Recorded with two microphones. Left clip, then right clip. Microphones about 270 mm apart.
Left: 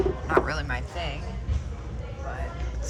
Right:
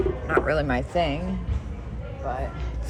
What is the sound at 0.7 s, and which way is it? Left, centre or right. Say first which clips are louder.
Speech: right 8 dB; centre.